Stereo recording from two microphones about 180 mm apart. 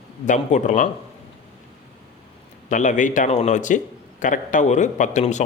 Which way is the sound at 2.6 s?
45° left (ahead or behind).